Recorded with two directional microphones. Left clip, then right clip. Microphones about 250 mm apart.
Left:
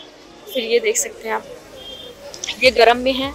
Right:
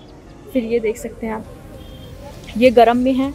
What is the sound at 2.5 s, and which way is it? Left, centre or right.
Speech, centre.